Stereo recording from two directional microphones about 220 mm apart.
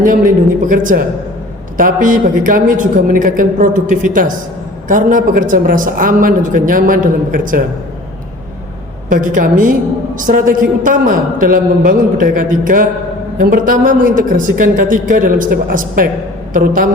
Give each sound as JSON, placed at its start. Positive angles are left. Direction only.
{"t": 0.0, "sound": "a man's voice", "side_deg": -40}
{"t": 4.9, "sound": "a man's voice", "side_deg": -35}
{"t": 9.0, "sound": "a man's voice", "side_deg": -40}